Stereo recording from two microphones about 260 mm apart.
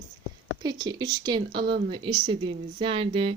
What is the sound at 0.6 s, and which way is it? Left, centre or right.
A woman's voice, centre.